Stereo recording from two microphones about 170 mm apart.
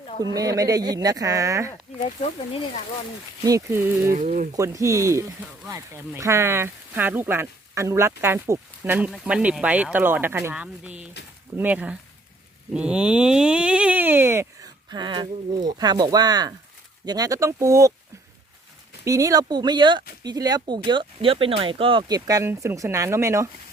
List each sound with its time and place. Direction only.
0.2 s speech: 20° right (ahead or behind)
2.0 s speech: 40° left (ahead or behind)
3.4 s a sound: 15° right (ahead or behind)
4.1 s speech: 50° right (ahead or behind)
4.5 s a sound: 20° right (ahead or behind)
17.1 s speech: 20° right (ahead or behind)
19.0 s speech: 20° right (ahead or behind)